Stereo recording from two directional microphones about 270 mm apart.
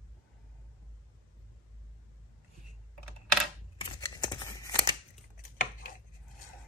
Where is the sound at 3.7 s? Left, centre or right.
Centre.